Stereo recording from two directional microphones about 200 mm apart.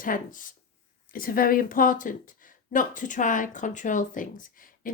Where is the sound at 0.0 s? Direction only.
45° left (ahead or behind).